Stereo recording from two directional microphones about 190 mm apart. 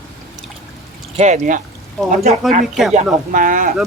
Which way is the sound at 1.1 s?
35° right (ahead or behind).